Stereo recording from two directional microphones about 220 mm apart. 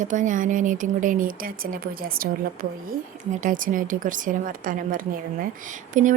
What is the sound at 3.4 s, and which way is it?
Speech, 35° right (ahead or behind).